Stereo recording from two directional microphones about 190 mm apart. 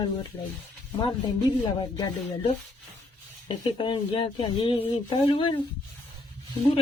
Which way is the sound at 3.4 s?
25° left (ahead or behind).